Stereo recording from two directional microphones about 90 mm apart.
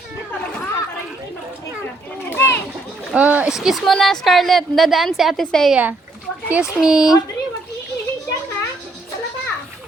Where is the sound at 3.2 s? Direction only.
15° right (ahead or behind).